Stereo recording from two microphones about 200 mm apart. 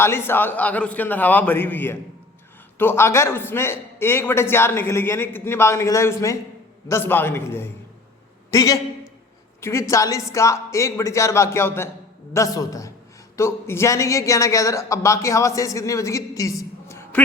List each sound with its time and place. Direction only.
0.0 s a man's voice: 10° left (ahead or behind)